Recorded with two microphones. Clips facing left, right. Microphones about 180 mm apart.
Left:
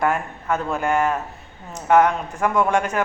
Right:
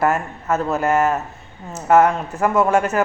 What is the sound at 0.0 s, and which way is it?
Speech, 5° right (ahead or behind).